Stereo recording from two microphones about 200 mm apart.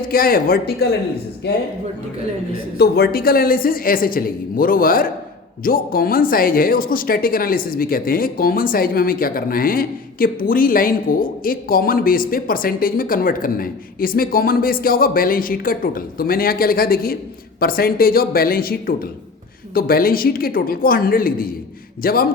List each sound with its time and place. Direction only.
0.1 s speech: 45° left (ahead or behind)
2.7 s speech: 50° left (ahead or behind)